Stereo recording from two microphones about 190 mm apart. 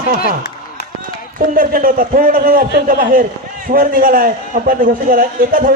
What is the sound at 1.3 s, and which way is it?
A man's voice, 45° right (ahead or behind).